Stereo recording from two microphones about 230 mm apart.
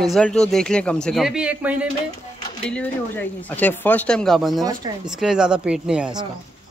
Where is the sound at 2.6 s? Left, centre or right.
Centre.